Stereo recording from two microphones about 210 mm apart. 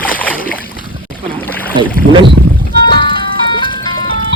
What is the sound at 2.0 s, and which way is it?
Speech, 60° right (ahead or behind).